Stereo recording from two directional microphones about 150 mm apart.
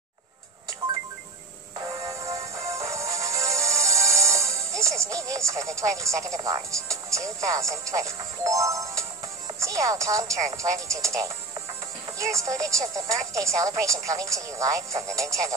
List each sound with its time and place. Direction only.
2.0 s music: 20° right (ahead or behind)
4.8 s speech: 20° right (ahead or behind)